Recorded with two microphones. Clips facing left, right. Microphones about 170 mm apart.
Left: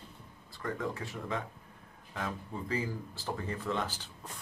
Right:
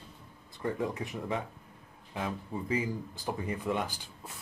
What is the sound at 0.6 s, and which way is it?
Speech, 20° right (ahead or behind).